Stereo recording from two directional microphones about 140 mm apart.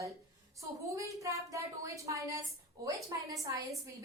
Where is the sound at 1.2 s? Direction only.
25° right (ahead or behind).